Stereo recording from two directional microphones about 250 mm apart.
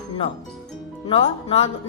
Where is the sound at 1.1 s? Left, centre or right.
Left.